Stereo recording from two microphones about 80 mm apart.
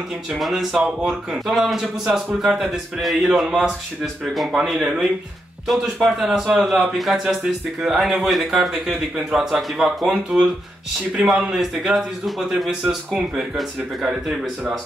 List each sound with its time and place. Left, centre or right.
0.3 s a man's voice: centre